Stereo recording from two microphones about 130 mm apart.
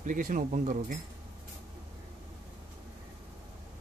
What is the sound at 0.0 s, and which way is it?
Speech, 85° right.